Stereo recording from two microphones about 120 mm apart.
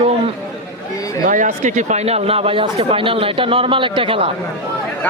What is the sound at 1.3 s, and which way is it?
Speech, 85° right.